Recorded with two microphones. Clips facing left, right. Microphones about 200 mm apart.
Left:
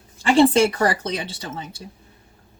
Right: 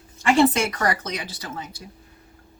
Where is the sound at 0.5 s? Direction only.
30° left (ahead or behind).